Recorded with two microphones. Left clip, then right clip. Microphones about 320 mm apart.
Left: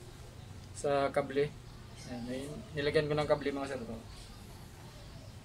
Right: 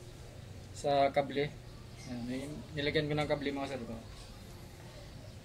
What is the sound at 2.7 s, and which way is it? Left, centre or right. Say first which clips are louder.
Speech: left 2 dB; left.